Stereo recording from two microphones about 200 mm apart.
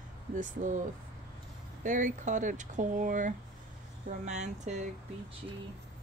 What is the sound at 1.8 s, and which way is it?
Speech, 40° right (ahead or behind).